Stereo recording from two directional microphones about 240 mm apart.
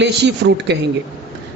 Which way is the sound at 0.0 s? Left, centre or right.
Right.